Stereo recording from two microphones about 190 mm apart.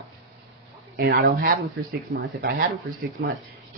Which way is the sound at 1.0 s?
55° right (ahead or behind).